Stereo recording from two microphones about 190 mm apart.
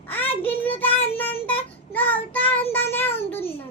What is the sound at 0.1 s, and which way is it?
Child singing, 10° left (ahead or behind).